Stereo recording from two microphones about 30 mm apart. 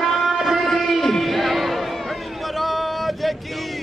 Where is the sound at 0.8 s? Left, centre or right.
Centre.